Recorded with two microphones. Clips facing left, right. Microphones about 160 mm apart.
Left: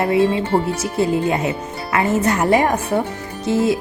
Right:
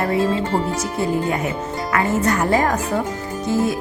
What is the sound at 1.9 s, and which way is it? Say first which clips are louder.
Speech: left 2 dB; 20° left (ahead or behind).